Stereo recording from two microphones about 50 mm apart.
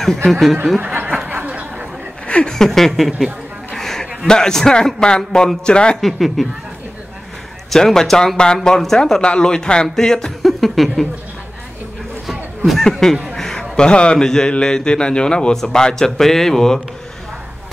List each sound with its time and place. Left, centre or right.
0.0 s speech: centre
1.5 s chatter: right
2.2 s a sound: left
2.5 s a man's voice: centre
5.9 s speech: centre
7.7 s a man's voice: centre
12.7 s a man's voice: centre
13.3 s a sound: centre
14.5 s a man's voice: centre